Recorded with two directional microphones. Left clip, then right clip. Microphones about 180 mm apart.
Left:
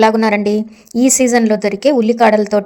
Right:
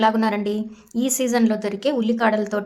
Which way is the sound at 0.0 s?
35° left (ahead or behind).